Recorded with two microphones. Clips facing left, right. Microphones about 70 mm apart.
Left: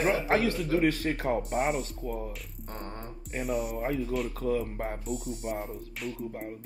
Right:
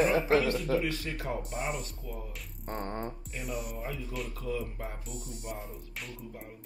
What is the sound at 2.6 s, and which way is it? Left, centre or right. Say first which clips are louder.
Music: right 5 dB; right.